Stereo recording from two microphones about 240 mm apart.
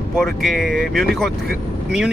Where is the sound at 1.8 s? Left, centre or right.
Centre.